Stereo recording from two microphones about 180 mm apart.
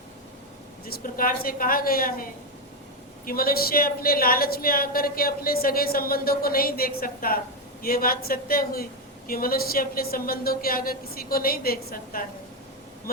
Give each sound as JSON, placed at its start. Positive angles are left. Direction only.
{"t": 0.9, "sound": "a woman's voice", "side_deg": 55}